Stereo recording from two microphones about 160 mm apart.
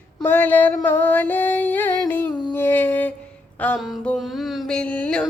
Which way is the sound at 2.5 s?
15° left (ahead or behind).